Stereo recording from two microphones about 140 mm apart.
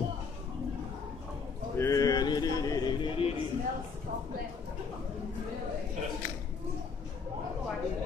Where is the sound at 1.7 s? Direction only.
20° left (ahead or behind).